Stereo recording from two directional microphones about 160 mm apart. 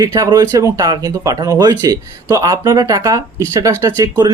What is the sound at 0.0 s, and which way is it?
Speech, 25° right (ahead or behind).